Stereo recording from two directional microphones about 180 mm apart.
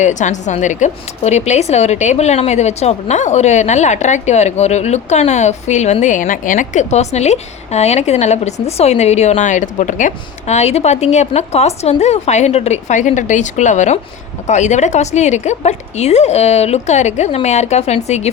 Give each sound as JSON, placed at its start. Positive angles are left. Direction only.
{"t": 0.0, "sound": "a woman's voice", "side_deg": 40}